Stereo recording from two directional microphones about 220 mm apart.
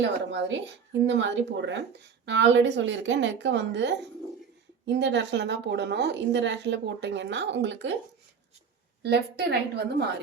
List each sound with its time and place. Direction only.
0.0 s a woman's voice: 55° right (ahead or behind)
9.0 s a woman's voice: 50° right (ahead or behind)